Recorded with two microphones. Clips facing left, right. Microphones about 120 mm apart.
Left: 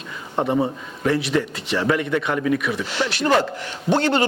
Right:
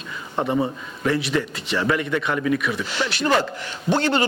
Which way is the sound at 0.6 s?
45° left (ahead or behind).